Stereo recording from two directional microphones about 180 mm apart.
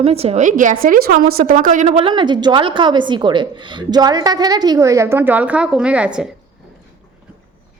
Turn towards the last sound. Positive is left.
turn(degrees=-5)  # may be behind; listen again after turning